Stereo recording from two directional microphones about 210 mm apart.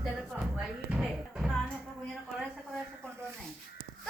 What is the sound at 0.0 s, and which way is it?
Music, 5° right (ahead or behind).